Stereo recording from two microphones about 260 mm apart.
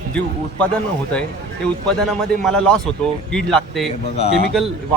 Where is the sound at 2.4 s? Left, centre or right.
Centre.